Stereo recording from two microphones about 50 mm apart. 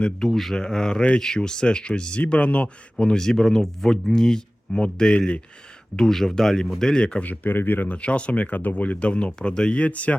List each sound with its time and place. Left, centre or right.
0.0 s speech: centre; by 2.6 s left
3.0 s speech: centre
6.0 s speech: centre
7.3 s speech: left
7.9 s speech: left